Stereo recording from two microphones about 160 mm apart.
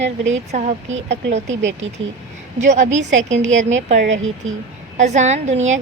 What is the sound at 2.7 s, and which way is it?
A woman's voice, 50° right (ahead or behind).